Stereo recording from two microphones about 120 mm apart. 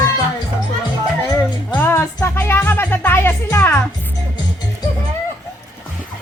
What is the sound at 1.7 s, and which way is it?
Music, 20° left (ahead or behind).